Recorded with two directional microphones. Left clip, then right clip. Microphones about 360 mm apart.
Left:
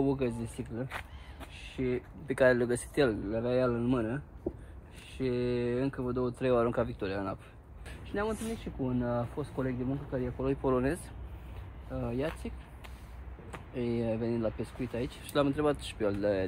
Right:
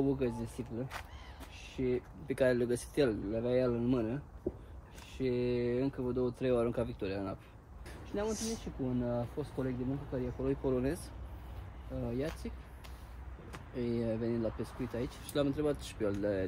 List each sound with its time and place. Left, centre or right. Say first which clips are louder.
0.0 s speech: left 2 dB; centre
4.5 s a sound: left 1 dB; left
5.1 s speech: left 2 dB; centre
12.0 s speech: left 3 dB; centre